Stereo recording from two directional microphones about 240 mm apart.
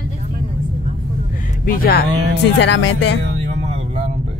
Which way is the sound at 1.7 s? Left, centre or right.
Left.